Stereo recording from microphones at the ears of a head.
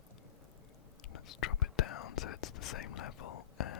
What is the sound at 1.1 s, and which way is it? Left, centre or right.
Whispering, left.